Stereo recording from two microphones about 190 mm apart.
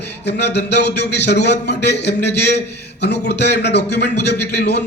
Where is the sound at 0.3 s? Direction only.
65° left (ahead or behind).